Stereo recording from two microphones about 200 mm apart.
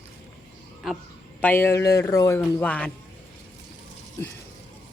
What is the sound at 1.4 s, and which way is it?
Speech, 10° left (ahead or behind).